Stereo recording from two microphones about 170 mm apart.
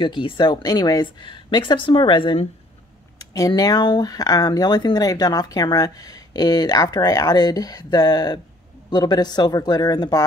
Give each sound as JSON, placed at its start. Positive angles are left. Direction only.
{"t": 0.0, "sound": "speech", "side_deg": 30}